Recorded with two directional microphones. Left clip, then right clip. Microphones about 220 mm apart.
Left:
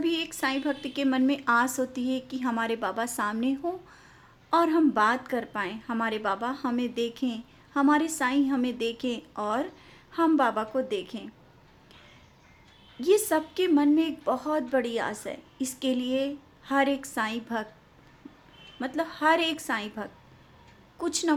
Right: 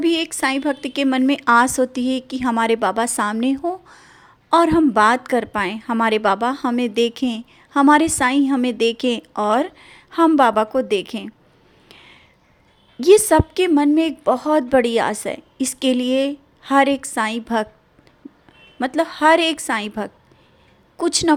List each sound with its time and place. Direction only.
0.0 s a woman's voice: 35° right (ahead or behind)
13.0 s a woman's voice: 35° right (ahead or behind)
18.8 s a woman's voice: 35° right (ahead or behind)